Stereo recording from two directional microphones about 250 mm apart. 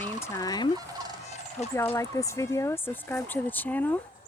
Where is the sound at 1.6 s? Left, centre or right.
Left.